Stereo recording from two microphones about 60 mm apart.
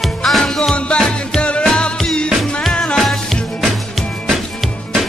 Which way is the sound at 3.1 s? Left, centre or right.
Centre.